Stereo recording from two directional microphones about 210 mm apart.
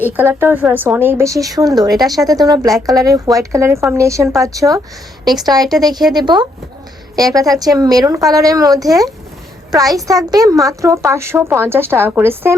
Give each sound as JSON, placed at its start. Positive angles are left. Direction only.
{"t": 0.2, "sound": "speech", "side_deg": -10}